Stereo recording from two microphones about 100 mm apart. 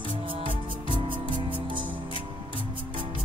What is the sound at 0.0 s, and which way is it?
Music, 55° right (ahead or behind).